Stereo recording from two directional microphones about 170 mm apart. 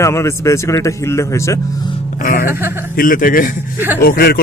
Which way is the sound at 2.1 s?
55° left (ahead or behind).